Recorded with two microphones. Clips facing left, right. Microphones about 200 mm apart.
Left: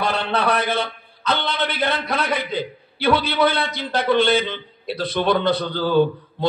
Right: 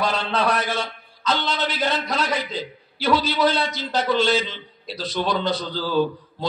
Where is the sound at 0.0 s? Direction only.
60° left (ahead or behind).